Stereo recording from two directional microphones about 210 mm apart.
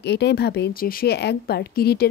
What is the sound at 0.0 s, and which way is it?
A woman's voice, 55° left (ahead or behind).